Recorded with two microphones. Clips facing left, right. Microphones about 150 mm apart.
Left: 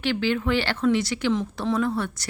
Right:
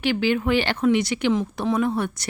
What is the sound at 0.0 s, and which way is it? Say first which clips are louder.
A woman's voice: right 2 dB; 15° right (ahead or behind).